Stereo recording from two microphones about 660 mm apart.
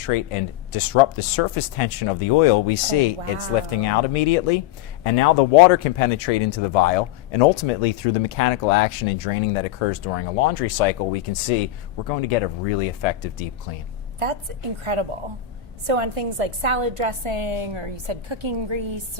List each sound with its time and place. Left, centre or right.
0.0 s speech: left
15.9 s a woman's voice: right